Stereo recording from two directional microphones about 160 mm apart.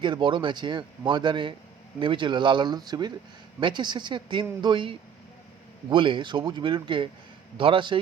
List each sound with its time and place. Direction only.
0.0 s a man's voice: 30° right (ahead or behind)